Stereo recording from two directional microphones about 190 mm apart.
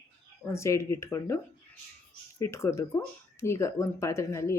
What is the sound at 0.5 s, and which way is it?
Speech, 15° left (ahead or behind).